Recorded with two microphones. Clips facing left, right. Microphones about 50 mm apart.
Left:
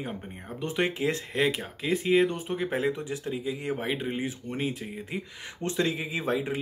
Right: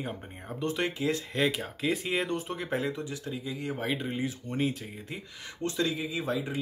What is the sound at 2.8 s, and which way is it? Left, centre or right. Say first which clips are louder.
Speech: left 4 dB; left.